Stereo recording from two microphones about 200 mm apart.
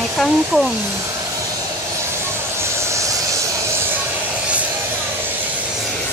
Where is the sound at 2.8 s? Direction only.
15° right (ahead or behind).